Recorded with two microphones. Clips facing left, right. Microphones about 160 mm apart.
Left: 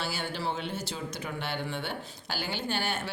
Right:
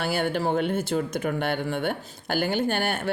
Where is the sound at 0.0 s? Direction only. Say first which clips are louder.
Right 8 dB; 55° right (ahead or behind).